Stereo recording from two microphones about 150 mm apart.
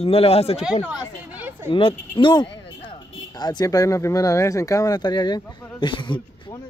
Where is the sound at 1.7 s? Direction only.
35° left (ahead or behind).